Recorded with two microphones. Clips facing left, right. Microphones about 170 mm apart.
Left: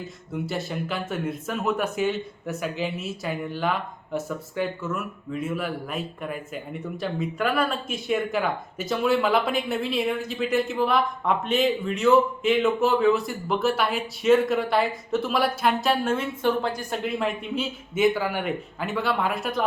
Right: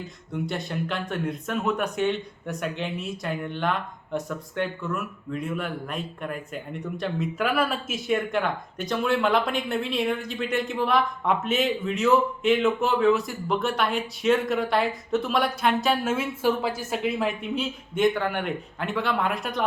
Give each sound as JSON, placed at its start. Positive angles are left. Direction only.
{"t": 0.3, "sound": "speech", "side_deg": 5}